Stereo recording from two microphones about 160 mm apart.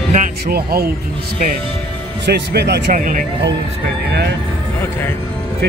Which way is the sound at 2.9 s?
55° right (ahead or behind).